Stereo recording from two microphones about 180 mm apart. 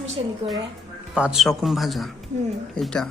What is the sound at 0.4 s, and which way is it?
Speech, 35° right (ahead or behind).